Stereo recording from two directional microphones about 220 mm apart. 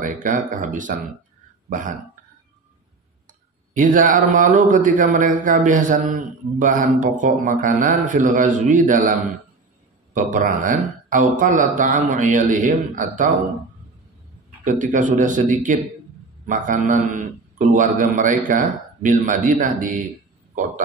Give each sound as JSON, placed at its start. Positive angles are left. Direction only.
{"t": 0.0, "sound": "speech", "side_deg": -35}
{"t": 3.3, "sound": "speech", "side_deg": -35}
{"t": 10.1, "sound": "speech", "side_deg": -35}
{"t": 14.6, "sound": "a man's voice", "side_deg": -35}